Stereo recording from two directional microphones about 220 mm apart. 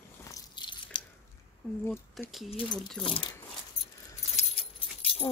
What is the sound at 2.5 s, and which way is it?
Speech, 20° left (ahead or behind).